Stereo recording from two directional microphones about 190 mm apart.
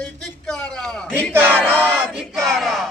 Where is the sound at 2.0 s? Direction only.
5° right (ahead or behind).